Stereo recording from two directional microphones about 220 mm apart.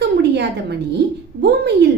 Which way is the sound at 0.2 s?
50° right (ahead or behind).